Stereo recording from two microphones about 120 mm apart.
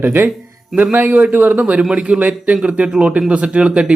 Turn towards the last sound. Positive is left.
turn(degrees=-10)  # may be behind; listen again after turning